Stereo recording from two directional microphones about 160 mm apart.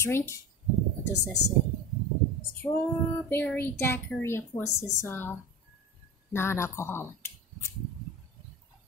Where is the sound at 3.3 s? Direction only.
10° left (ahead or behind).